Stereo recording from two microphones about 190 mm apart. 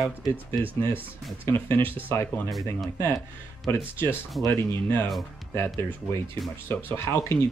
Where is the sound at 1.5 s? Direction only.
10° left (ahead or behind).